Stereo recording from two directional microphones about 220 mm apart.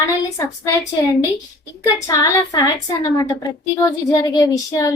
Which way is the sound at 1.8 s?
15° left (ahead or behind).